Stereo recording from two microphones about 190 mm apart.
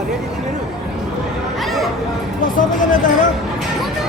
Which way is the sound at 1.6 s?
Centre (ahead or behind).